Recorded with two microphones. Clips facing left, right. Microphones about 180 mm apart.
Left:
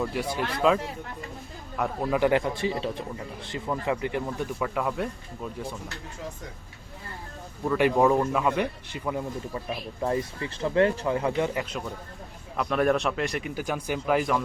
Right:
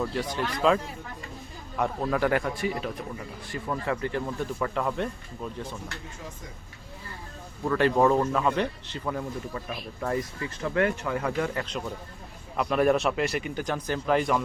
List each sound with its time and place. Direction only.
0.1 s a man's voice: 10° left (ahead or behind)
2.0 s speech: 20° left (ahead or behind)
3.7 s speech: 15° left (ahead or behind)
7.6 s speech: 10° left (ahead or behind)
12.5 s speech: 5° right (ahead or behind)